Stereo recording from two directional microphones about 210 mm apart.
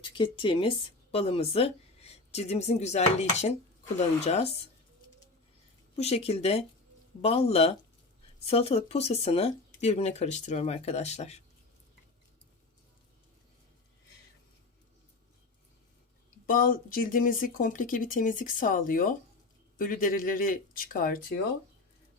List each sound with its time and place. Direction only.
0.1 s a woman's voice: 25° left (ahead or behind)
6.0 s speech: 30° left (ahead or behind)
16.5 s speech: 40° left (ahead or behind)